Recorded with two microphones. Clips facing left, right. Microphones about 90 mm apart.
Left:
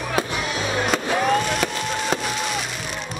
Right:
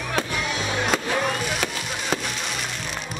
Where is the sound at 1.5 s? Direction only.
Centre (ahead or behind).